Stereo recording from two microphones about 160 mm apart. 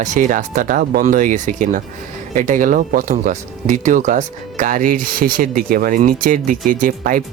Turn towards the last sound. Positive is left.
turn(degrees=-60)  # may be behind; listen again after turning